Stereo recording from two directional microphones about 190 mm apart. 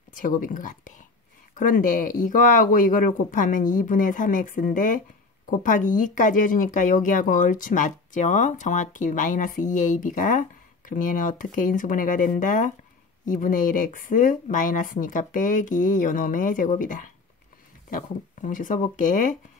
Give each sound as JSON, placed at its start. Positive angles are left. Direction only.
{"t": 0.1, "sound": "speech", "side_deg": 45}